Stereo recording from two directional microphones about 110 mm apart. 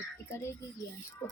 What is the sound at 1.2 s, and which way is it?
Music, 20° left (ahead or behind).